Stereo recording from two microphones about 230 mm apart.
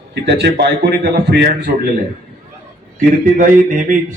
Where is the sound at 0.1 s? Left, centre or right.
Right.